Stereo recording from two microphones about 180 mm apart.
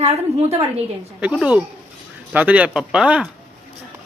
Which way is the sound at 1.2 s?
5° right (ahead or behind).